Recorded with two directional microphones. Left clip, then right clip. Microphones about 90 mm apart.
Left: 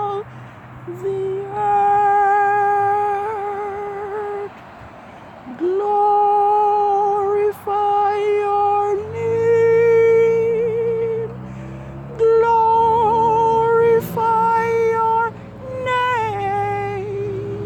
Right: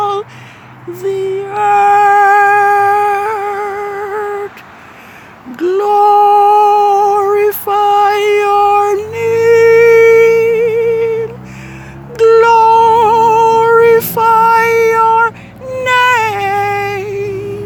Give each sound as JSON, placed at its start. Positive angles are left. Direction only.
{"t": 0.0, "sound": "a sound", "side_deg": -40}
{"t": 1.0, "sound": "music", "side_deg": -30}
{"t": 5.5, "sound": "humming", "side_deg": -40}
{"t": 9.0, "sound": "music", "side_deg": -30}
{"t": 12.1, "sound": "humming", "side_deg": -30}
{"t": 15.7, "sound": "a sound", "side_deg": -25}